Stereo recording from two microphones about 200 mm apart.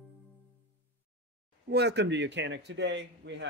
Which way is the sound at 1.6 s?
55° right (ahead or behind).